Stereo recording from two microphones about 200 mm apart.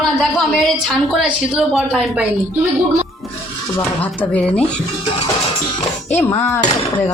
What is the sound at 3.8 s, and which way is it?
Speech, 10° left (ahead or behind).